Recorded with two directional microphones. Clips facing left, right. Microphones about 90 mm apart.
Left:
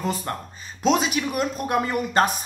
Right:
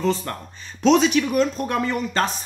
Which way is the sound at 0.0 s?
15° left (ahead or behind).